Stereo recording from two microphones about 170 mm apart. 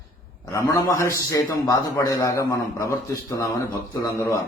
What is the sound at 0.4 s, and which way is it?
Speech, 20° left (ahead or behind).